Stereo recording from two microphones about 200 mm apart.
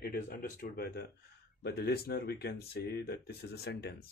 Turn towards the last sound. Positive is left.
turn(degrees=55)  # may be behind; listen again after turning